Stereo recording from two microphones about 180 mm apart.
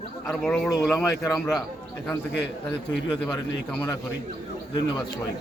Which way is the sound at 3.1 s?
25° left (ahead or behind).